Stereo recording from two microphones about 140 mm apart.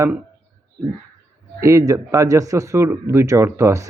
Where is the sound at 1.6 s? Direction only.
25° right (ahead or behind).